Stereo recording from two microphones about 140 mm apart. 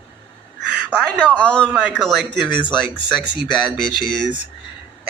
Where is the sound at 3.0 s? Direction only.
35° left (ahead or behind).